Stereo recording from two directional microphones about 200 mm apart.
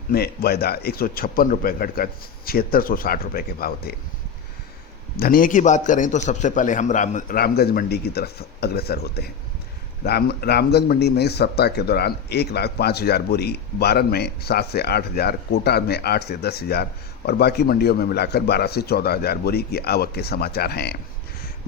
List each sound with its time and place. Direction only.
0.1 s a man's voice: 50° left (ahead or behind)
5.1 s a man's voice: 45° left (ahead or behind)